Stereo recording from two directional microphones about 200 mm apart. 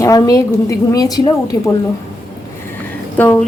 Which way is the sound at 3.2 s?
5° left (ahead or behind).